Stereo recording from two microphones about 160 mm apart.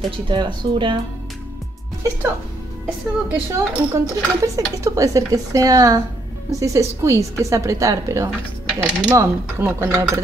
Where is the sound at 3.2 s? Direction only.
15° right (ahead or behind).